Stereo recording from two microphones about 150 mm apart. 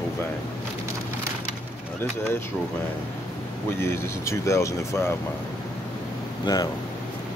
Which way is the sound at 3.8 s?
20° left (ahead or behind).